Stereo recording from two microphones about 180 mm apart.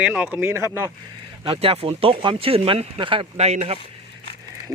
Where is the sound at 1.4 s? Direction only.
30° right (ahead or behind).